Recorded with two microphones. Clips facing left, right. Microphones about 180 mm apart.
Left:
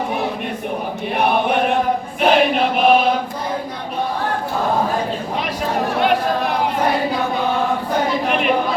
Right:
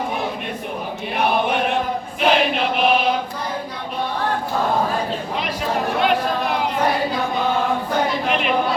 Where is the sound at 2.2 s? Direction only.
45° left (ahead or behind).